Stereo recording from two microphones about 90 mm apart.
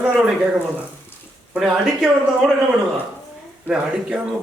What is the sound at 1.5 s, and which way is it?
Speech, 5° right (ahead or behind).